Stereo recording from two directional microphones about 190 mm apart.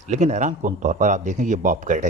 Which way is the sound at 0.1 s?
40° right (ahead or behind).